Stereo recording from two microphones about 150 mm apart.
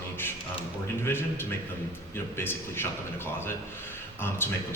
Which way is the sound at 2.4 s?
15° left (ahead or behind).